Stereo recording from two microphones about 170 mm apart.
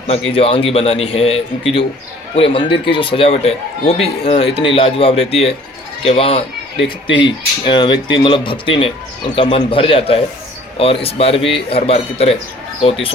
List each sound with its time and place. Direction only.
0.1 s a man's voice: 35° left (ahead or behind)